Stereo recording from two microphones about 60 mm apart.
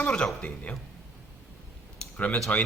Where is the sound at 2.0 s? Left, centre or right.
Centre.